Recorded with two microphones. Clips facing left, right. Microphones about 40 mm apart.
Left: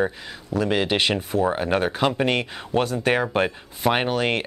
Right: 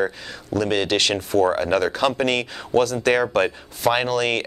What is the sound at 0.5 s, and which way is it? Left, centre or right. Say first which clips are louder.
Speech: right 1 dB; centre.